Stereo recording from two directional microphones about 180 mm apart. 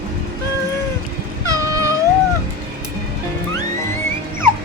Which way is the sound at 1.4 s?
20° right (ahead or behind).